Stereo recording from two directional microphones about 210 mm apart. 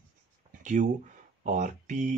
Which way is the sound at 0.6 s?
35° right (ahead or behind).